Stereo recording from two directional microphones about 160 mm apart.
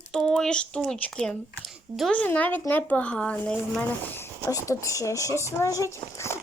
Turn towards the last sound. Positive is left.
turn(degrees=15)  # may be behind; listen again after turning